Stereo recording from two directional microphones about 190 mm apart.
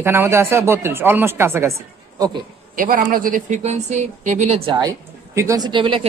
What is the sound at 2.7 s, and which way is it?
Speech, 45° right (ahead or behind).